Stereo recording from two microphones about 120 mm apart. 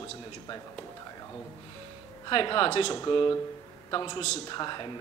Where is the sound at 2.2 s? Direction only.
45° left (ahead or behind).